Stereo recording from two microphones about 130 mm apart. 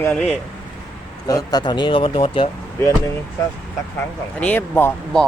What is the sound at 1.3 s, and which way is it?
Speech, 30° left (ahead or behind).